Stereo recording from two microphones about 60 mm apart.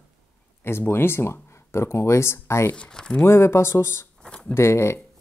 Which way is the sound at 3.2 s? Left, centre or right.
Left.